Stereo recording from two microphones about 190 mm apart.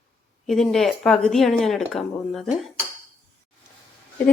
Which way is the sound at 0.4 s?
Centre (ahead or behind).